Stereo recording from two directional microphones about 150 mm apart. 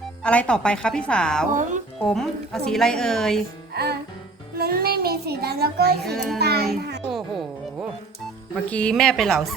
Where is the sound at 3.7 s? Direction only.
90° right.